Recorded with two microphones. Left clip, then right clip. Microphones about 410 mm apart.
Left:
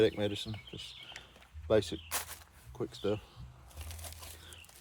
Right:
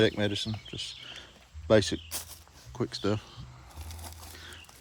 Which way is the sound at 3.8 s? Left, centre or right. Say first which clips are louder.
Right 1 dB; centre.